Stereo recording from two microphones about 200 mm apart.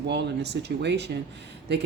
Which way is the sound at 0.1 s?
55° right (ahead or behind).